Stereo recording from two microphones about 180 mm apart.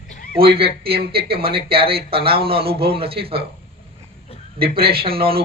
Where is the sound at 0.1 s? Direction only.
50° left (ahead or behind).